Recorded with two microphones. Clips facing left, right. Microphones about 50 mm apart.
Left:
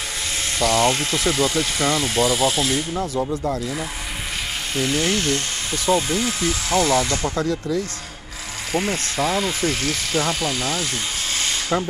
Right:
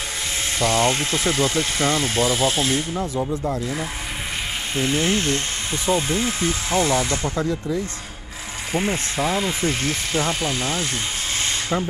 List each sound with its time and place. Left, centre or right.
0.6 s speech: right
2.9 s speech: centre
4.7 s speech: right
8.7 s speech: centre
11.7 s speech: centre